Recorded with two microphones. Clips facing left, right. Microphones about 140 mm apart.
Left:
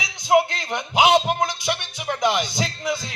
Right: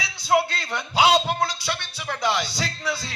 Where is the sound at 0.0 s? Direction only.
15° left (ahead or behind).